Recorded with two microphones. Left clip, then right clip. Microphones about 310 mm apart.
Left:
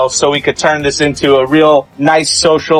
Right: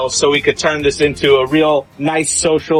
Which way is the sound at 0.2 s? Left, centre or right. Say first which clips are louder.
Left 2 dB; left.